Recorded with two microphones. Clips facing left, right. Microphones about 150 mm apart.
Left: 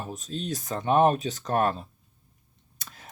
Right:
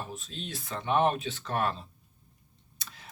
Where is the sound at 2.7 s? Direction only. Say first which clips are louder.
Left 2 dB; 50° left (ahead or behind).